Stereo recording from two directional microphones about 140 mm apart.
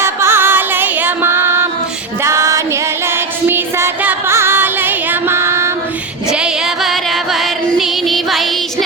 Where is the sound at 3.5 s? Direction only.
15° right (ahead or behind).